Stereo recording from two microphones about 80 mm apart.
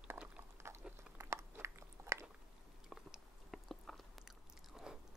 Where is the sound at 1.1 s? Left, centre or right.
Right.